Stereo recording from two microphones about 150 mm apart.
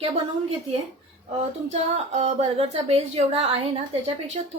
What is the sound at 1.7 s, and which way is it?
A woman's voice, 50° right (ahead or behind).